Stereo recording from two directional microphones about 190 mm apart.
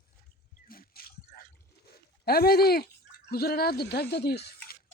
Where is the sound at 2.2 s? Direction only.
55° left (ahead or behind).